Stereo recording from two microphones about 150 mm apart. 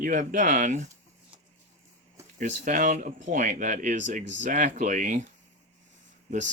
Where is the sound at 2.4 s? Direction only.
60° right (ahead or behind).